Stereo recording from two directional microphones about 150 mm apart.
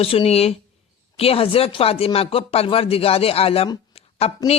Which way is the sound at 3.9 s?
40° left (ahead or behind).